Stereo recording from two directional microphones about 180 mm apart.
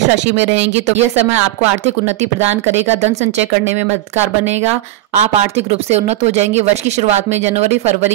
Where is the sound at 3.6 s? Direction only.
40° right (ahead or behind).